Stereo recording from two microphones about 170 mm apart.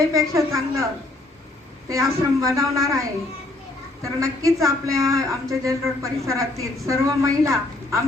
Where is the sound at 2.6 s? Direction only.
20° right (ahead or behind).